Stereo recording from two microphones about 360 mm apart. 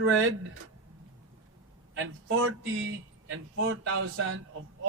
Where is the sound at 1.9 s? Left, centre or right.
Right.